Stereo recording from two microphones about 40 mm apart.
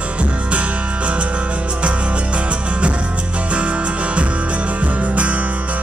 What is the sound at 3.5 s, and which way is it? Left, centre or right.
Music, right.